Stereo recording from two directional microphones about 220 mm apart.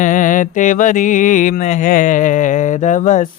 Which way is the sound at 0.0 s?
35° left (ahead or behind).